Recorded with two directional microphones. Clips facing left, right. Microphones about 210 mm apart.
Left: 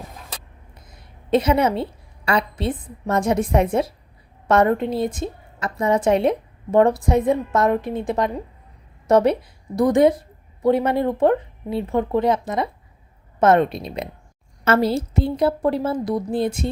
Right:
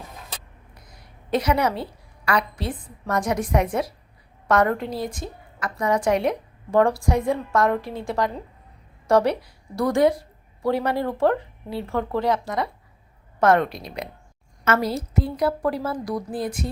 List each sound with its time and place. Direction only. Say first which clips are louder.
0.7 s a woman's voice: left 1 dB; 25° left (ahead or behind)